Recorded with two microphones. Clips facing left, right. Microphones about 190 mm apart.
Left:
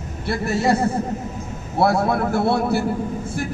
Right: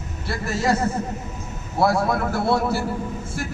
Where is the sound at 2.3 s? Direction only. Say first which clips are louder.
Left 2 dB; 60° left (ahead or behind).